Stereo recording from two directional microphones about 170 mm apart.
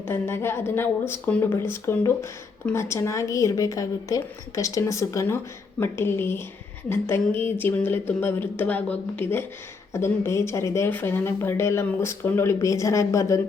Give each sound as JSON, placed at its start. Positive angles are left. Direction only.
{"t": 0.1, "sound": "a woman's voice", "side_deg": 15}